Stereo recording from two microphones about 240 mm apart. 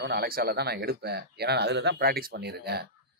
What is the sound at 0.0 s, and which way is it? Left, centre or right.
Speech, right.